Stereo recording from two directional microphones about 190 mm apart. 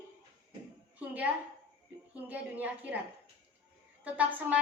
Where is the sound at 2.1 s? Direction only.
10° right (ahead or behind).